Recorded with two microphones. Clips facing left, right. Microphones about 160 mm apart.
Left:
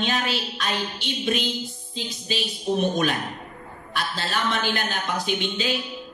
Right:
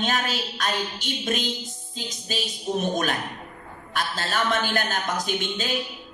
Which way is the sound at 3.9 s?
45° right (ahead or behind).